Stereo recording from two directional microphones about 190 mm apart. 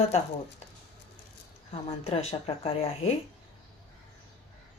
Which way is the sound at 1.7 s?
30° left (ahead or behind).